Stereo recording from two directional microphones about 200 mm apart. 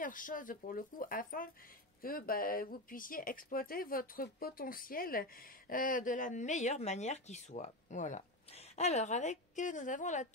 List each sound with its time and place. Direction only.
0.0 s speech: 40° left (ahead or behind)